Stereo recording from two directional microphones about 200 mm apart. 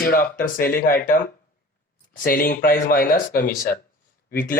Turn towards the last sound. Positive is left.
turn(degrees=45)  # may be behind; listen again after turning